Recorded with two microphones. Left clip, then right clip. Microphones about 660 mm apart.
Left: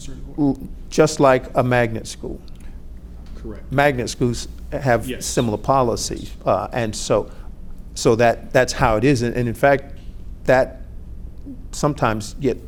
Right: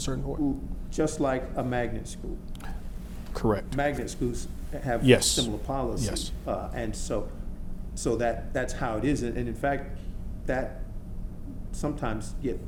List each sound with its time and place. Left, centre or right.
0.4 s a man's voice: left
3.3 s speech: right
3.8 s a man's voice: left
11.7 s a man's voice: left